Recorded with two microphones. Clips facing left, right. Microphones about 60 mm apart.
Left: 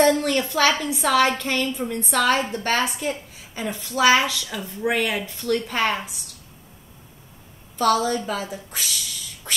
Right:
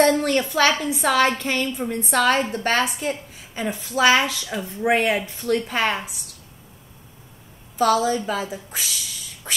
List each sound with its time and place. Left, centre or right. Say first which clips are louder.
0.0 s a woman's voice: right 1 dB; centre
4.5 s speech: right 4 dB; right
5.4 s a woman's voice: left 2 dB; centre
7.7 s a woman's voice: right 1 dB; centre